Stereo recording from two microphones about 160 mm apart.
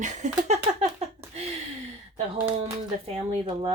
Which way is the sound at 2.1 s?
40° right (ahead or behind).